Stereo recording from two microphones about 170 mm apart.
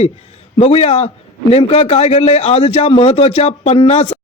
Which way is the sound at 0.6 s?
40° left (ahead or behind).